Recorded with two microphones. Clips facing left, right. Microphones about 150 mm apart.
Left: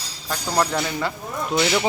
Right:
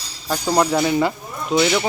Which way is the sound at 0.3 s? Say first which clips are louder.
Right 4 dB; 10° right (ahead or behind).